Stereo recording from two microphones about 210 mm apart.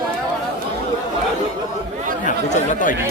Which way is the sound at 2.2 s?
35° left (ahead or behind).